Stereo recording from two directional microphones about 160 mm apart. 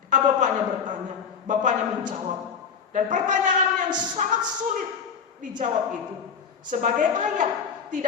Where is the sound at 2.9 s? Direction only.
50° right (ahead or behind).